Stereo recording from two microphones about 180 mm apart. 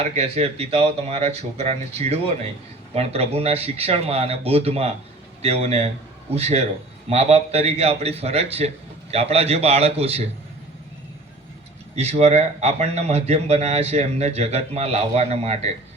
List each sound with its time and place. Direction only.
0.0 s a man's voice: 35° right (ahead or behind)
11.9 s a man's voice: 35° right (ahead or behind)